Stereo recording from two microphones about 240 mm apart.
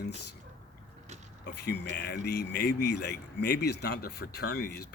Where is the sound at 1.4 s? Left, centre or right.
Left.